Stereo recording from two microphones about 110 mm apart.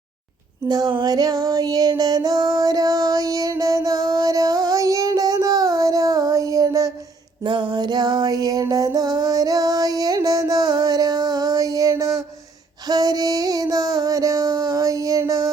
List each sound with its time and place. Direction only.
0.7 s female singing: 35° right (ahead or behind)
7.4 s music: 40° right (ahead or behind)